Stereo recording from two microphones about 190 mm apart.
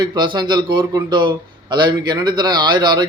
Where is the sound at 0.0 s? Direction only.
25° right (ahead or behind).